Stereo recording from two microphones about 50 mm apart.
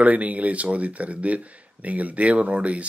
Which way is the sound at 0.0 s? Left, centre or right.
Right.